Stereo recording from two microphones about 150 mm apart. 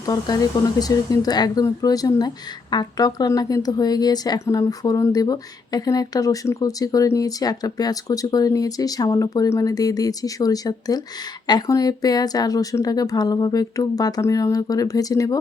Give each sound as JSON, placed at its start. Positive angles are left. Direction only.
{"t": 0.0, "sound": "speech", "side_deg": 25}